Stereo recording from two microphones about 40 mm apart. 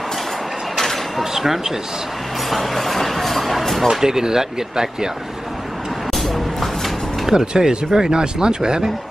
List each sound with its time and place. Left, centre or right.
0.7 s a sound: centre
1.3 s speech: centre
2.5 s a sound: centre
3.8 s speech: centre
6.1 s vehicle: centre
7.2 s speech: centre